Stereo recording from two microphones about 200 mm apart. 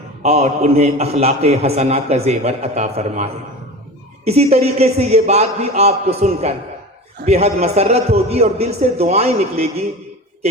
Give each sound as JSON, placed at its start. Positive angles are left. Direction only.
{"t": 0.2, "sound": "a man's voice", "side_deg": -35}
{"t": 4.3, "sound": "a man's voice", "side_deg": -30}